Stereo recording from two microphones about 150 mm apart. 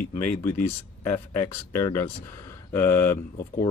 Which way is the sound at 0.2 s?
15° left (ahead or behind).